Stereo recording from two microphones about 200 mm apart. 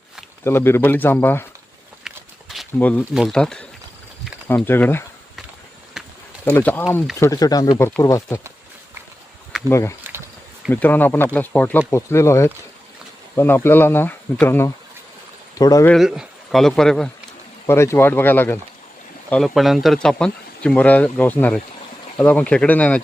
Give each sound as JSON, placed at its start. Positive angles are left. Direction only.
{"t": 0.4, "sound": "speech", "side_deg": 10}
{"t": 2.0, "sound": "a sound", "side_deg": 0}
{"t": 4.4, "sound": "speech", "side_deg": 10}
{"t": 6.0, "sound": "a sound", "side_deg": 0}
{"t": 6.4, "sound": "speech", "side_deg": 5}
{"t": 9.6, "sound": "speech", "side_deg": 15}
{"t": 15.9, "sound": "speech", "side_deg": 0}
{"t": 17.7, "sound": "speech", "side_deg": 15}